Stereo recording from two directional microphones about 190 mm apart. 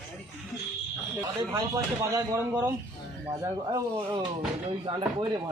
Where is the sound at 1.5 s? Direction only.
15° right (ahead or behind).